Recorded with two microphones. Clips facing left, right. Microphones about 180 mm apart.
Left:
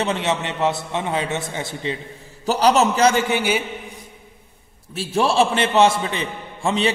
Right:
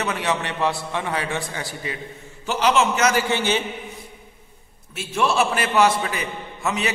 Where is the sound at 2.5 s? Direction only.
35° left (ahead or behind).